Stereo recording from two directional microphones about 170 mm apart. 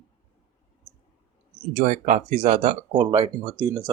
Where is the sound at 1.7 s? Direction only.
50° right (ahead or behind).